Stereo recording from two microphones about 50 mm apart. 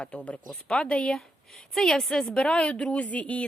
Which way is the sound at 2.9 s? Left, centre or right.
Left.